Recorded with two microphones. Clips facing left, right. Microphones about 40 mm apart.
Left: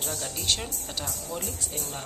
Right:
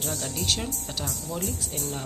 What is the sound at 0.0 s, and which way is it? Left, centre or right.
Speech, centre.